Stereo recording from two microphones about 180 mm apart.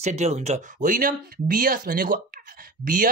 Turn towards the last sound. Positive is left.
turn(degrees=-50)  # may be behind; listen again after turning